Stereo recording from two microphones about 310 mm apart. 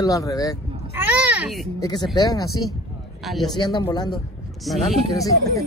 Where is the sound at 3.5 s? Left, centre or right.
Centre.